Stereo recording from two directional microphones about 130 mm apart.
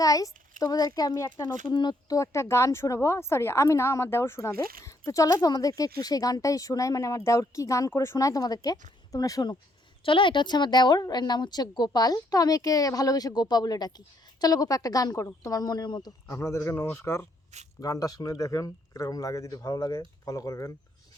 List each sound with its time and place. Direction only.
0.0 s a child's voice: 25° left (ahead or behind)
10.0 s speech: 40° left (ahead or behind); by 20.7 s 25° left (ahead or behind)